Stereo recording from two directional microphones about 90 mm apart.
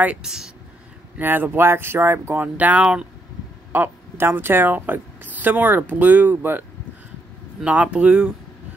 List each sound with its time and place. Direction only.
0.0 s speech: 10° right (ahead or behind)
1.1 s a woman's voice: 20° right (ahead or behind)
3.7 s a woman's voice: 25° right (ahead or behind)
7.6 s speech: 15° right (ahead or behind)